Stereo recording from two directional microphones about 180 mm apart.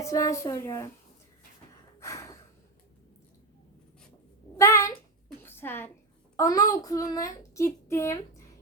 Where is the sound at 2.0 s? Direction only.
15° left (ahead or behind).